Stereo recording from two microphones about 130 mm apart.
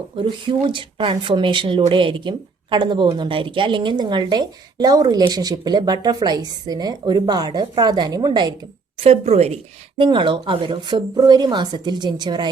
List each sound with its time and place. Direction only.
0.2 s speech: 40° right (ahead or behind)
9.0 s a woman's voice: 55° right (ahead or behind)
10.0 s speech: 40° right (ahead or behind)